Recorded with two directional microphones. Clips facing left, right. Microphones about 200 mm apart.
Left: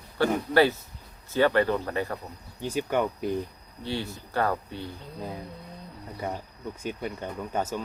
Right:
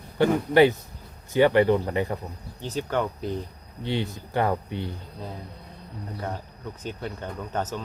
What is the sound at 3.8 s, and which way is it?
Speech, 20° right (ahead or behind).